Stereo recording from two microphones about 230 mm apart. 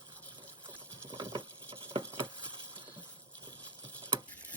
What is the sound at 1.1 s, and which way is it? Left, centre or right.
Patter, centre.